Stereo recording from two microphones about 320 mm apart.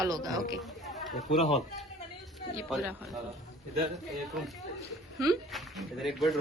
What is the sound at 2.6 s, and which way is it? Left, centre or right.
Speech, centre.